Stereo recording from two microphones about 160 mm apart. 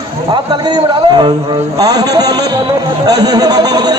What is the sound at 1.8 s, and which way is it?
Speech, 25° right (ahead or behind).